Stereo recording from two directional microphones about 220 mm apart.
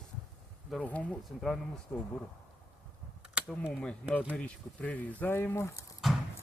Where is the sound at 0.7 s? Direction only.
5° left (ahead or behind).